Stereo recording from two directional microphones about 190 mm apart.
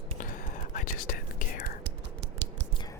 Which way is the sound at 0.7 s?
45° left (ahead or behind).